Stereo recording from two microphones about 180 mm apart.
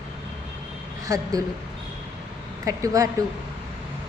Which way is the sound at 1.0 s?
20° right (ahead or behind).